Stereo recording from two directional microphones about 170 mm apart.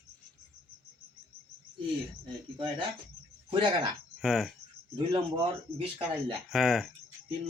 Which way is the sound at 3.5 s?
30° right (ahead or behind).